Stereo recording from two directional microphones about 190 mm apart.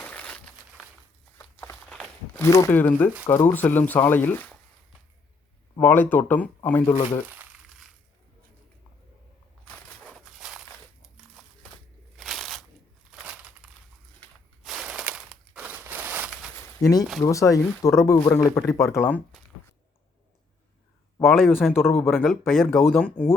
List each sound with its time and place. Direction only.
0.0 s a sound: 5° left (ahead or behind)
1.4 s a sound: 5° left (ahead or behind)
2.4 s speech: 15° left (ahead or behind)
5.8 s speech: 10° left (ahead or behind)
6.9 s speech: 35° left (ahead or behind)
7.3 s crumpling: 10° right (ahead or behind)
9.6 s a sound: 5° left (ahead or behind)
12.1 s crunch: centre (ahead or behind)
13.1 s crushing: 5° right (ahead or behind)
14.2 s a sound: centre (ahead or behind)
16.8 s speech: 15° left (ahead or behind)
21.2 s speech: centre (ahead or behind)